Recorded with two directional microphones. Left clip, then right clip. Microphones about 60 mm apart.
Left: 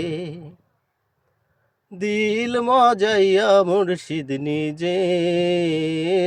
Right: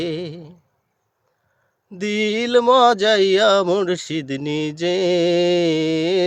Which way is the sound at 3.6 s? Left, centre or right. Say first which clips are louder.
Right 1 dB; right.